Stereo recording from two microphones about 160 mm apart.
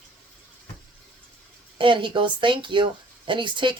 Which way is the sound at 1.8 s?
30° right (ahead or behind).